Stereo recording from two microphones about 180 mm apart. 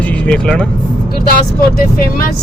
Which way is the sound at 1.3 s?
55° left (ahead or behind).